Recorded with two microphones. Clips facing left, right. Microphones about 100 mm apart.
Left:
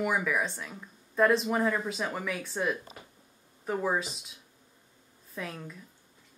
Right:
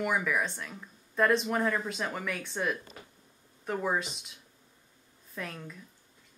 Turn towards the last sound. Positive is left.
turn(degrees=5)  # may be behind; listen again after turning